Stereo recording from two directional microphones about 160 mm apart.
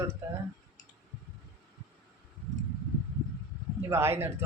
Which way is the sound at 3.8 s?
15° right (ahead or behind).